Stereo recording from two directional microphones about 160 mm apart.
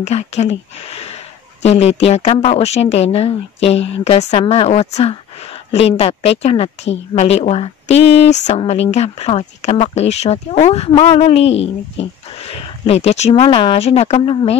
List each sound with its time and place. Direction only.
0.0 s speech: 45° left (ahead or behind)